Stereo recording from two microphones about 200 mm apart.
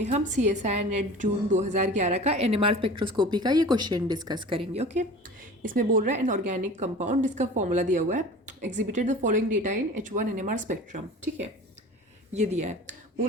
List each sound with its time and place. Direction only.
0.0 s a woman's voice: 35° right (ahead or behind)
12.3 s a woman's voice: 35° right (ahead or behind)